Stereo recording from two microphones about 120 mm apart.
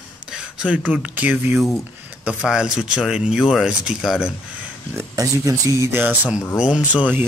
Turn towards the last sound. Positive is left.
turn(degrees=-15)  # may be behind; listen again after turning